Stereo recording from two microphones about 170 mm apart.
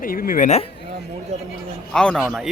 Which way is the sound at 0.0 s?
55° left (ahead or behind).